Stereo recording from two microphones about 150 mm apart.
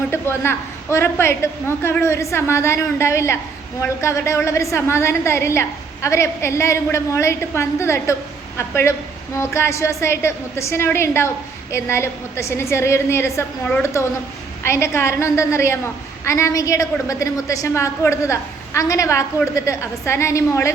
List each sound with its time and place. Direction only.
0.1 s a woman's voice: 15° left (ahead or behind)